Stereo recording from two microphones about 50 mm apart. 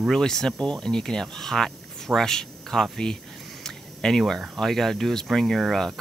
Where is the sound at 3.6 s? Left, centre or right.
Centre.